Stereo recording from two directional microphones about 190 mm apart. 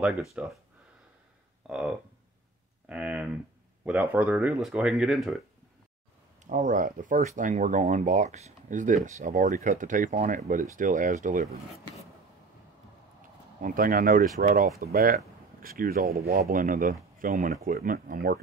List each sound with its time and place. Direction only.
0.0 s speech: 5° right (ahead or behind)
1.7 s speech: 5° right (ahead or behind)
6.4 s speech: 40° right (ahead or behind)
13.6 s speech: 45° right (ahead or behind)